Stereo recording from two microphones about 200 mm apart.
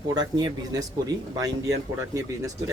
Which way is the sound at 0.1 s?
20° right (ahead or behind).